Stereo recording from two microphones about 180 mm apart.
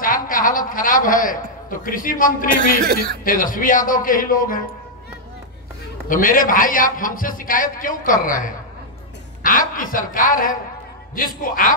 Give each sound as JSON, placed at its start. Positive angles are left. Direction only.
{"t": 0.0, "sound": "a man's voice", "side_deg": 50}
{"t": 2.8, "sound": "speech", "side_deg": -60}
{"t": 3.3, "sound": "a man's voice", "side_deg": 50}
{"t": 6.0, "sound": "a man's voice", "side_deg": 50}